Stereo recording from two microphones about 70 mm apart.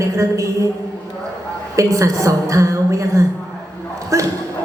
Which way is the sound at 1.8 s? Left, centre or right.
Right.